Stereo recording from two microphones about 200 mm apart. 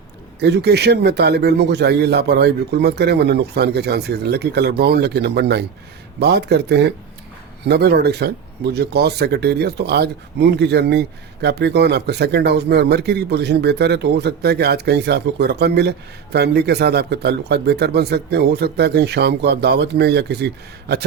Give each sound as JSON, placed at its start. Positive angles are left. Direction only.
{"t": 0.3, "sound": "speech", "side_deg": -55}